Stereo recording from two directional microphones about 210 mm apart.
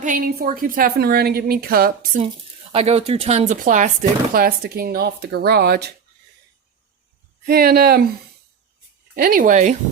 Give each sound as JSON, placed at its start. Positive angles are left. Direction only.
{"t": 0.0, "sound": "speech", "side_deg": -40}
{"t": 2.7, "sound": "speech", "side_deg": -30}
{"t": 7.4, "sound": "speech", "side_deg": -45}
{"t": 9.1, "sound": "speech", "side_deg": -45}